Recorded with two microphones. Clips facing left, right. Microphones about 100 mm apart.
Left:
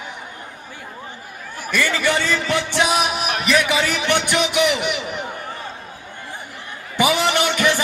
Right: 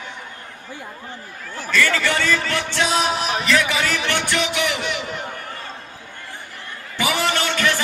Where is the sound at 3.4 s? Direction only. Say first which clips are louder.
Left 3 dB; 15° left (ahead or behind).